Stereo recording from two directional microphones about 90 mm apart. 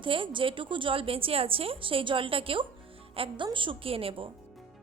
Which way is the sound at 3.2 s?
65° right (ahead or behind).